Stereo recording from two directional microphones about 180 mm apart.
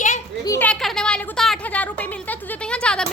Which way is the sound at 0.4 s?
15° left (ahead or behind).